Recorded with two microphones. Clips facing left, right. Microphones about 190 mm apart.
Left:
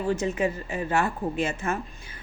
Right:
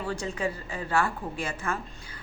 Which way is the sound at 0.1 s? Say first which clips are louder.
Left 6 dB; 20° left (ahead or behind).